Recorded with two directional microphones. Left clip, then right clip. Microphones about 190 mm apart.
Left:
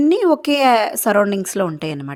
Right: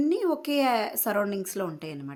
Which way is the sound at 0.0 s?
45° left (ahead or behind).